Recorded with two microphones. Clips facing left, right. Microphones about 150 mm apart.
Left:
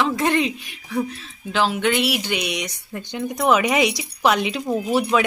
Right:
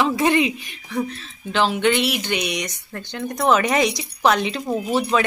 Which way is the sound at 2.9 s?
15° left (ahead or behind).